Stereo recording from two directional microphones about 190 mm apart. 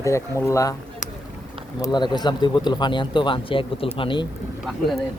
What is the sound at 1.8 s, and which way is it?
Speech, 25° left (ahead or behind).